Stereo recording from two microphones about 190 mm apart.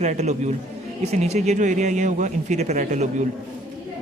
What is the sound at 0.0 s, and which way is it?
Speech, 35° right (ahead or behind).